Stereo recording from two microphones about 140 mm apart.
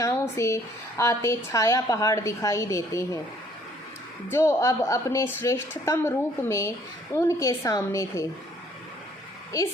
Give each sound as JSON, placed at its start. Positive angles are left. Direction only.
{"t": 0.0, "sound": "a woman's voice", "side_deg": 20}
{"t": 4.3, "sound": "a woman's voice", "side_deg": 20}